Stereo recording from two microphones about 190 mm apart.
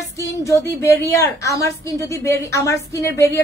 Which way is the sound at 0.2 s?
15° left (ahead or behind).